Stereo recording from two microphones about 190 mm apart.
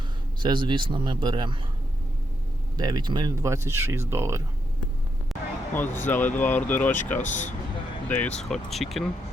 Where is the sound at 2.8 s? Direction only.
20° right (ahead or behind).